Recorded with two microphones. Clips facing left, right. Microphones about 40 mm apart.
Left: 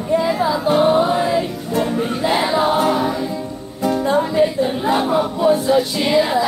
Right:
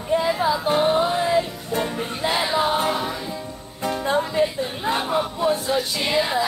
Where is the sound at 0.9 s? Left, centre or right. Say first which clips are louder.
Left 3 dB; centre.